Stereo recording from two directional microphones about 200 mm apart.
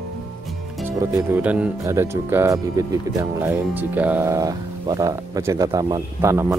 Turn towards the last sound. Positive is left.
turn(degrees=-15)  # may be behind; listen again after turning